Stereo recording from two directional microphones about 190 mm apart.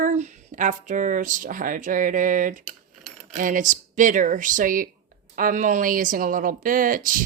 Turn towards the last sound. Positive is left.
turn(degrees=-45)  # may be behind; listen again after turning